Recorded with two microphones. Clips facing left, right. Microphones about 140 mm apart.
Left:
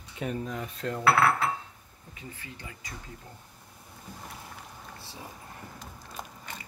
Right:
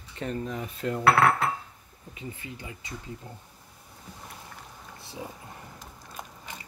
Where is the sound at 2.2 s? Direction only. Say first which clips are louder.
Right 4 dB; 20° right (ahead or behind).